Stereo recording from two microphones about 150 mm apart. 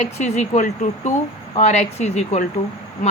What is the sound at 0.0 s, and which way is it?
Speech, 50° left (ahead or behind).